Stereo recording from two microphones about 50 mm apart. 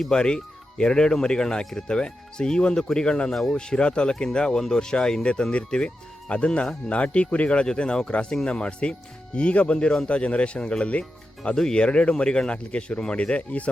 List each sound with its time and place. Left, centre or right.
0.0 s speech: centre
3.3 s speech: centre
3.6 s speech: centre